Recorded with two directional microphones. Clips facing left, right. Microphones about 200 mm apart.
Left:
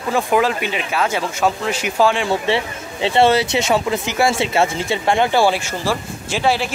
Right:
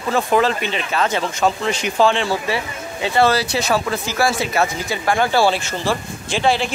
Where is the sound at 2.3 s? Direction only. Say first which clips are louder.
Left 3 dB; 25° left (ahead or behind).